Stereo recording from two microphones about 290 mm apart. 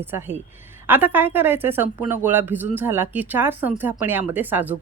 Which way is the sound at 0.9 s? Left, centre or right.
Centre.